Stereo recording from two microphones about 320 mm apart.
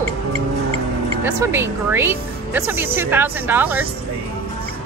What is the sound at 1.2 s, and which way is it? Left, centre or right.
A woman's voice, centre.